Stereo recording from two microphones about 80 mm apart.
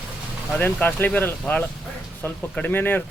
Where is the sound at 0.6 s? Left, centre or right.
Left.